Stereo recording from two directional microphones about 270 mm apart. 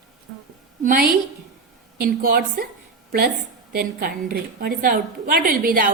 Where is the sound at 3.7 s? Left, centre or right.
Right.